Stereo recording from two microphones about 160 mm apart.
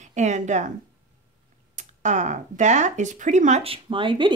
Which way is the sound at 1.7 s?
50° right (ahead or behind).